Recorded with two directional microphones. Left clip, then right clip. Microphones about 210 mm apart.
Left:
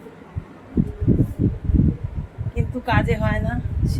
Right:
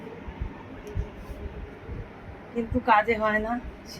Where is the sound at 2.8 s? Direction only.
Centre (ahead or behind).